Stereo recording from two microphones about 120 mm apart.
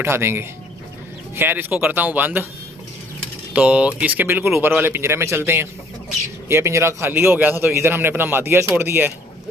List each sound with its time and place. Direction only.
0.0 s a man's voice: 20° right (ahead or behind)
3.5 s a man's voice: 10° right (ahead or behind)